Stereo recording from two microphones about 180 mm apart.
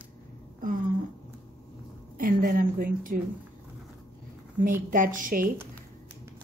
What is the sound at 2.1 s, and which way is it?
A woman's voice, 50° right (ahead or behind).